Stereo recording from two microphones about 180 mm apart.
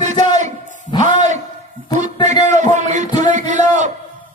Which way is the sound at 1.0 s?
40° right (ahead or behind).